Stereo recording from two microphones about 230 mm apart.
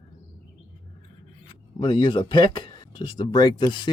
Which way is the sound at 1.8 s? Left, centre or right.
Left.